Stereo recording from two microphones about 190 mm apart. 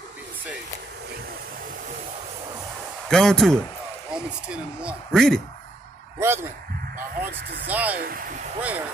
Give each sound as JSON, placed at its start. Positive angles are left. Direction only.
{"t": 3.1, "sound": "speech", "side_deg": 5}
{"t": 4.8, "sound": "speech", "side_deg": 0}
{"t": 6.1, "sound": "speech", "side_deg": -10}
{"t": 7.2, "sound": "speech", "side_deg": -65}
{"t": 7.6, "sound": "speech", "side_deg": -10}
{"t": 8.0, "sound": "speech", "side_deg": -50}
{"t": 8.5, "sound": "speech", "side_deg": -10}